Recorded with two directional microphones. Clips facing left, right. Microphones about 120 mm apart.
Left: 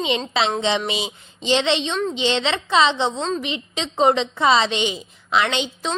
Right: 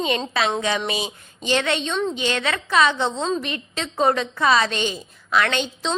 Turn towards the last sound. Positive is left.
turn(degrees=15)  # may be behind; listen again after turning